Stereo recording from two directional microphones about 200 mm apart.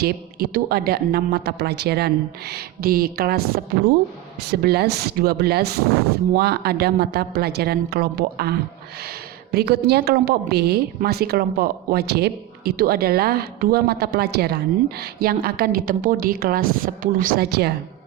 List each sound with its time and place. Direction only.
0.0 s a woman's voice: 50° right (ahead or behind)